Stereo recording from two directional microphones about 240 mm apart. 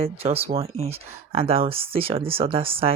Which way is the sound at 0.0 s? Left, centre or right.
Right.